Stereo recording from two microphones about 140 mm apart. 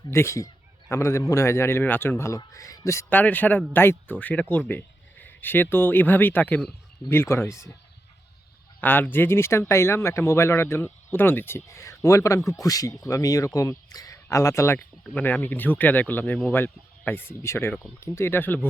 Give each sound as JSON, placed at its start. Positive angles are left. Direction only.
{"t": 0.1, "sound": "speech", "side_deg": 20}
{"t": 8.8, "sound": "speech", "side_deg": 15}